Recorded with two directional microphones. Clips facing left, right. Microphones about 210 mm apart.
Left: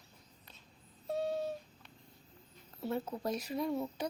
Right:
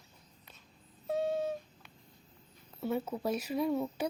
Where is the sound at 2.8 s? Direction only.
Centre (ahead or behind).